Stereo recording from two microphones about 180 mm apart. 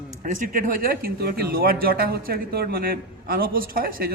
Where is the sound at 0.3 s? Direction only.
50° right (ahead or behind).